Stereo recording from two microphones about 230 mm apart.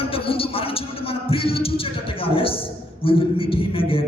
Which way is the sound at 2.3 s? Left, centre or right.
Left.